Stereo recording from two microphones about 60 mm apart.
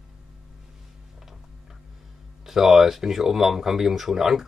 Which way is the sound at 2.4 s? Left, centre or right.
Centre.